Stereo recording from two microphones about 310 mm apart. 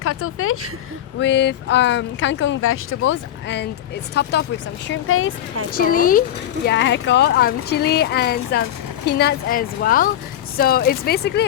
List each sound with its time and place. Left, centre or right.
0.0 s speech: left
5.7 s speech: left